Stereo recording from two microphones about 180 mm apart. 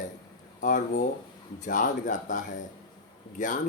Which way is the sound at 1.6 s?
50° left (ahead or behind).